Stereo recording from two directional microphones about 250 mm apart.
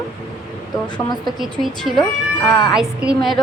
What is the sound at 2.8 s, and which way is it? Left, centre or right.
Speech, centre.